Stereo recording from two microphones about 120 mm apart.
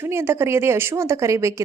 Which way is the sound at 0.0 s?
20° right (ahead or behind).